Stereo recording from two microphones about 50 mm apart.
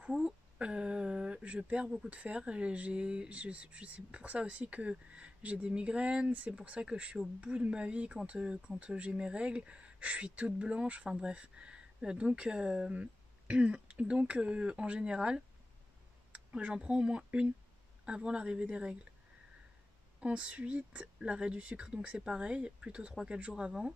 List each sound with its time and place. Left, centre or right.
0.2 s a sound: right
2.0 s speech: right
20.2 s speech: right